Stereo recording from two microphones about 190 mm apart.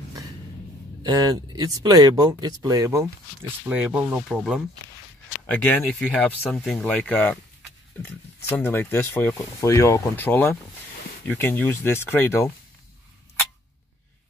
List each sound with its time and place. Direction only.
1.0 s speech: 20° right (ahead or behind)
3.6 s speech: 5° right (ahead or behind)
5.5 s speech: 10° left (ahead or behind)